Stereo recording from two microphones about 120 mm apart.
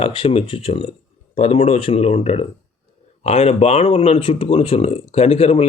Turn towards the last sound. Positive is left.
turn(degrees=55)  # may be behind; listen again after turning